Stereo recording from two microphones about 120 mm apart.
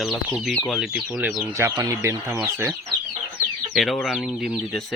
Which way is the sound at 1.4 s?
20° right (ahead or behind).